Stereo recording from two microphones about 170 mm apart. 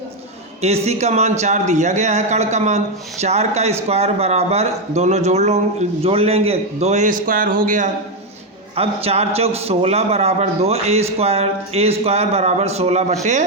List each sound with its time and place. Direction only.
0.6 s a man's voice: 40° right (ahead or behind)
8.7 s speech: 35° right (ahead or behind)